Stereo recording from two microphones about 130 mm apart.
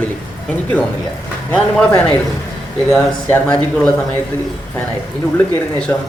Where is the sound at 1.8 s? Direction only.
10° left (ahead or behind).